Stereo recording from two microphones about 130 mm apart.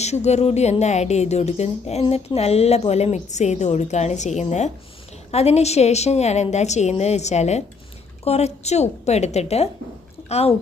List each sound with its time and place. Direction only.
0.0 s speech: 60° left (ahead or behind)